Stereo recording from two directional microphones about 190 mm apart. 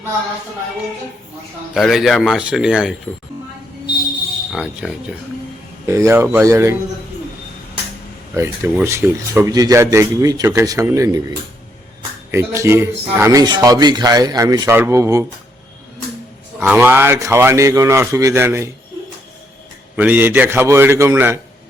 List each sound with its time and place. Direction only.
1.7 s speech: centre (ahead or behind)
4.5 s speech: 5° right (ahead or behind)
5.9 s a man's voice: 15° right (ahead or behind)
8.4 s a man's voice: 10° right (ahead or behind)
16.6 s a man's voice: 10° right (ahead or behind)
20.0 s a man's voice: 10° right (ahead or behind)